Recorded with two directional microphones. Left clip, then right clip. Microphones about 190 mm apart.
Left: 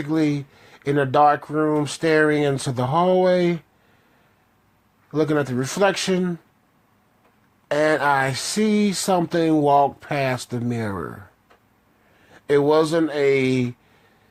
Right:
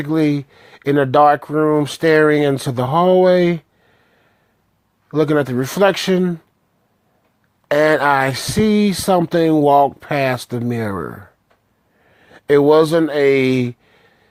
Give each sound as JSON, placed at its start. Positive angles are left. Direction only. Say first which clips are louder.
{"t": 0.0, "sound": "speech", "louder": "right 5 dB", "side_deg": -40}
{"t": 5.1, "sound": "speech", "louder": "right 5 dB", "side_deg": -45}
{"t": 7.7, "sound": "speech", "louder": "right 5 dB", "side_deg": -45}